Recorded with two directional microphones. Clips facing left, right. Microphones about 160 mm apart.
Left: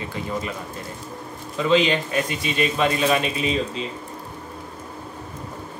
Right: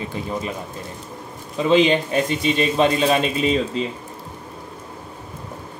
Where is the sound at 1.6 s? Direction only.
25° right (ahead or behind).